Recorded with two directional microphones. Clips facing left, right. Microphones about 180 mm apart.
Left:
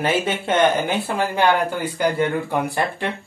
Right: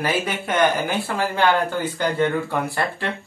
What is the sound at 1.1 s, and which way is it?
Speech, 10° left (ahead or behind).